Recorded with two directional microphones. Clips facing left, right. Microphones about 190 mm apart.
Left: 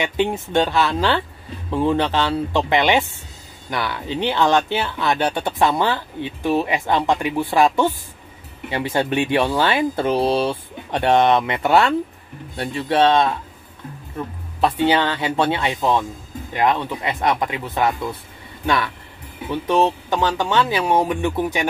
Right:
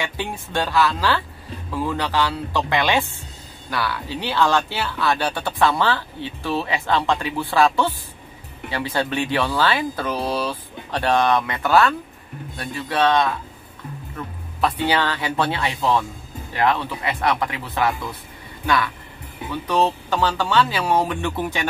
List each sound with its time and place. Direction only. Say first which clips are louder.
0.0 s speech: left 7 dB; 20° left (ahead or behind)
19.5 s speech: left 3 dB; 20° left (ahead or behind)